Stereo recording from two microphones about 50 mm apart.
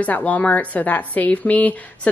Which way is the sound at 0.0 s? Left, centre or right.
Left.